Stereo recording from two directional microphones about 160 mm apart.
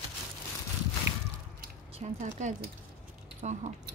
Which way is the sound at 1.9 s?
50° right (ahead or behind).